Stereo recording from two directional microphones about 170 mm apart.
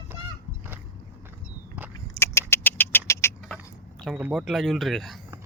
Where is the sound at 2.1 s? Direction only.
15° left (ahead or behind).